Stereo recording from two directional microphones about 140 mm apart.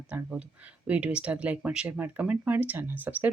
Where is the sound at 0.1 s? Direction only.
10° right (ahead or behind).